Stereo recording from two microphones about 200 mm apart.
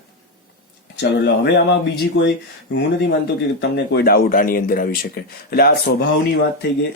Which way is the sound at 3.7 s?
55° left (ahead or behind).